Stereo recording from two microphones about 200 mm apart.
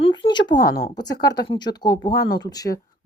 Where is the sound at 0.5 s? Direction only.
55° left (ahead or behind).